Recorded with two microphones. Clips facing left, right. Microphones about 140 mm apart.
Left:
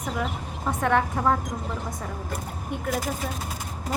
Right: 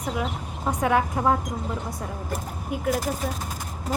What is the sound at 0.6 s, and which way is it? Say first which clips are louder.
Speech: right 1 dB; 15° right (ahead or behind).